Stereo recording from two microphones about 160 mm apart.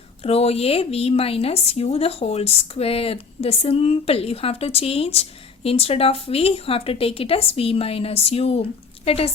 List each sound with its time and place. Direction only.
0.2 s a woman's voice: 40° left (ahead or behind)